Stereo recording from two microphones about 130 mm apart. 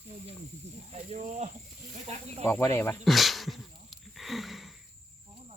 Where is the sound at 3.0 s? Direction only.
Centre (ahead or behind).